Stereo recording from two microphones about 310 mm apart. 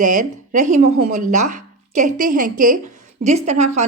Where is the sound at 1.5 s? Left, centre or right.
Right.